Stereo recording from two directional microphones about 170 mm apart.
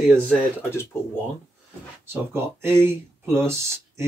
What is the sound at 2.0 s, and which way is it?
Speech, 15° right (ahead or behind).